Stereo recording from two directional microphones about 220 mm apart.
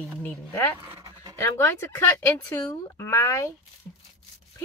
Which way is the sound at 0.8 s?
15° right (ahead or behind).